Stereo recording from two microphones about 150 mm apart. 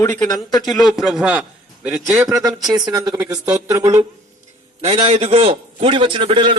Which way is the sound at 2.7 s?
25° right (ahead or behind).